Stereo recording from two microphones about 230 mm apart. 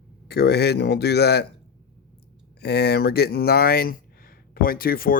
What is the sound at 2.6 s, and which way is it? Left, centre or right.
Speech, left.